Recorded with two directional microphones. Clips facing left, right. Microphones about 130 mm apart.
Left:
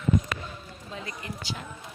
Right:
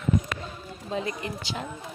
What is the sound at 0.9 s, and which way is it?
Speech, 20° right (ahead or behind).